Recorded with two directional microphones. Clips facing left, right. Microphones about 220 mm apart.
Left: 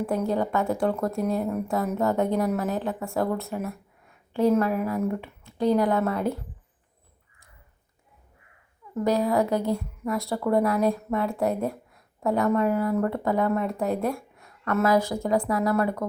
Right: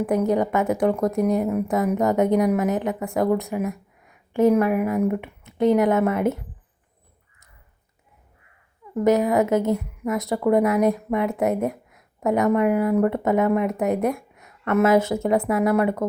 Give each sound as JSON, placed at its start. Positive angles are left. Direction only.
{"t": 0.0, "sound": "a woman's voice", "side_deg": -15}
{"t": 9.0, "sound": "a woman's voice", "side_deg": -20}